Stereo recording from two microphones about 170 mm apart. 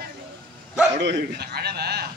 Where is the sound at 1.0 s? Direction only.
70° right (ahead or behind).